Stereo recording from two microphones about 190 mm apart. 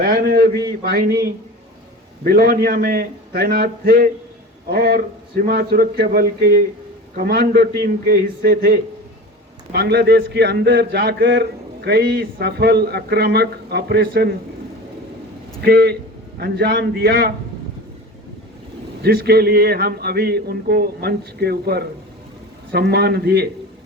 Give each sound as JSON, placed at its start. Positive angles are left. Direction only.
{"t": 0.0, "sound": "a man's voice", "side_deg": -50}
{"t": 15.6, "sound": "a man's voice", "side_deg": -55}
{"t": 19.0, "sound": "a man's voice", "side_deg": -55}